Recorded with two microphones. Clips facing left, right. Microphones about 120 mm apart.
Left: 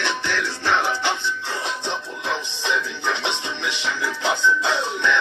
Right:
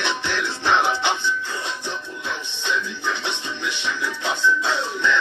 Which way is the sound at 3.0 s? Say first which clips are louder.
Left 2 dB; 20° left (ahead or behind).